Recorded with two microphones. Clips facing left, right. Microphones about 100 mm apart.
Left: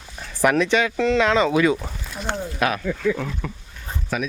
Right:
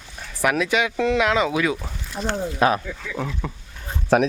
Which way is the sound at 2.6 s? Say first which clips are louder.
Right 4 dB; 30° right (ahead or behind).